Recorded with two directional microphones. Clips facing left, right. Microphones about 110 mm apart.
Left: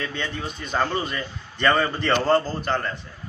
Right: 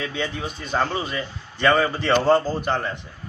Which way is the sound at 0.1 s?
10° right (ahead or behind).